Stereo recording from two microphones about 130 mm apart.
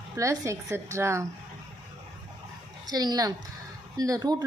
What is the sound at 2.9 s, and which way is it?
A woman's voice, 30° right (ahead or behind).